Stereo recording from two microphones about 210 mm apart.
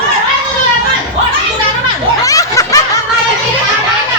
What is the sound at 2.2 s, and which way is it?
Snicker, 15° left (ahead or behind).